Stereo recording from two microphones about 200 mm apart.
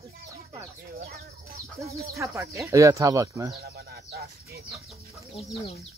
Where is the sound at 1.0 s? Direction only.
50° right (ahead or behind).